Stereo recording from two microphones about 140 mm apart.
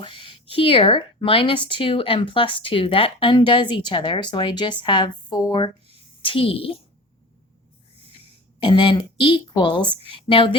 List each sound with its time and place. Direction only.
0.0 s speech: 40° left (ahead or behind)
8.6 s speech: 35° left (ahead or behind)